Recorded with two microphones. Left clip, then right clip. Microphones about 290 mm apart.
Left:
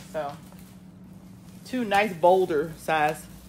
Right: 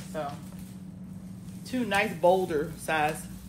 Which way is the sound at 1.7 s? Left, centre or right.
Left.